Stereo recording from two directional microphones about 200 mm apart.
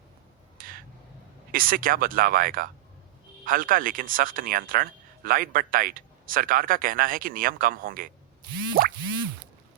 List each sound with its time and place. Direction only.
0.6 s crow: 45° right (ahead or behind)
1.5 s speech: 45° right (ahead or behind)